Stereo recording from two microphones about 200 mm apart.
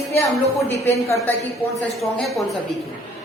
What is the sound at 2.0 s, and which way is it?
Speech, centre (ahead or behind).